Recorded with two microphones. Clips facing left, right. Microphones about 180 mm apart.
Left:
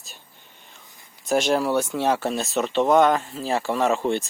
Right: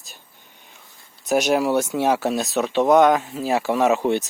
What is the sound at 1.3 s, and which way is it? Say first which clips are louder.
Speech: right 2 dB; 5° right (ahead or behind).